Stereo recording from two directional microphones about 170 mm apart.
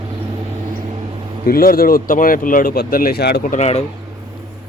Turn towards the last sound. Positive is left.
turn(degrees=40)  # may be behind; listen again after turning